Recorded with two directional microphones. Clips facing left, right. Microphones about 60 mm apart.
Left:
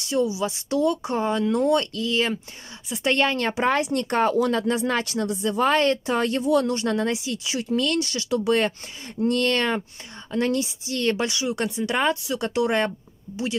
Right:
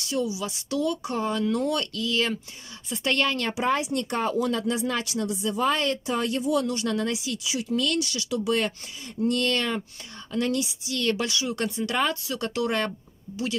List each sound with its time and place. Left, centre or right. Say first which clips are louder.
0.0 s speech: left 5 dB; left
3.5 s speech: left 3 dB; left
7.4 s speech: left 2 dB; left